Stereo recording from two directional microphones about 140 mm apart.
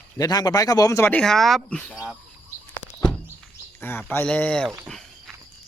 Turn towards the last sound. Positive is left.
turn(degrees=5)  # may be behind; listen again after turning